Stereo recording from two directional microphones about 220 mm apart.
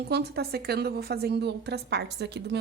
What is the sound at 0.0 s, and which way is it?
A woman's voice, 45° right (ahead or behind).